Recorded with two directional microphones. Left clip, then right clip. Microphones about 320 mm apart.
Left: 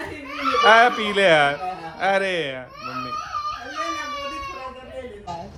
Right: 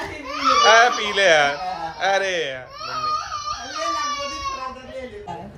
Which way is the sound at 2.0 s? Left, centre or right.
Centre.